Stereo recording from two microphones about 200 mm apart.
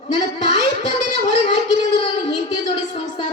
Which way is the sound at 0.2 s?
25° left (ahead or behind).